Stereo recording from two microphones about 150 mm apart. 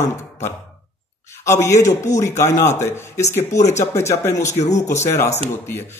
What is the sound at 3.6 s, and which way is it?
Speech, 50° left (ahead or behind).